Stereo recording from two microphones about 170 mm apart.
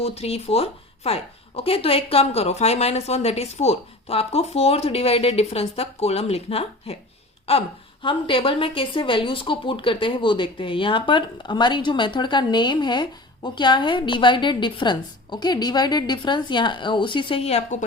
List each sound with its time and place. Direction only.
0.0 s a woman's voice: 35° left (ahead or behind)
8.0 s a woman's voice: 30° left (ahead or behind)